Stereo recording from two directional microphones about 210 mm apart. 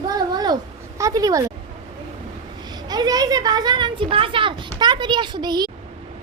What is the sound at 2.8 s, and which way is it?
Speech, 20° right (ahead or behind).